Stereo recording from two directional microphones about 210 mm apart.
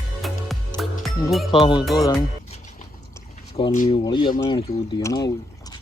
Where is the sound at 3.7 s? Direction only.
35° left (ahead or behind).